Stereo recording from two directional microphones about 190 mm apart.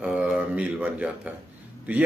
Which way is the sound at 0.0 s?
5° right (ahead or behind).